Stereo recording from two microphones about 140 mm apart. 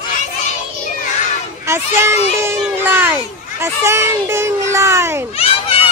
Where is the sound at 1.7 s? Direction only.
20° right (ahead or behind).